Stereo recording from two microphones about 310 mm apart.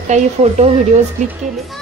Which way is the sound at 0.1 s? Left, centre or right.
Right.